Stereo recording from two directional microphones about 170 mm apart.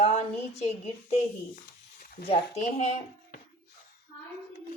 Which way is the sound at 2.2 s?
40° left (ahead or behind).